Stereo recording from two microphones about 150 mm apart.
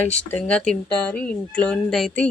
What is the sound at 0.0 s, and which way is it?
Speech, 10° left (ahead or behind).